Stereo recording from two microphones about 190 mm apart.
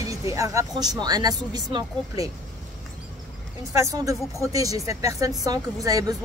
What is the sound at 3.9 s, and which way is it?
Speech, 20° right (ahead or behind).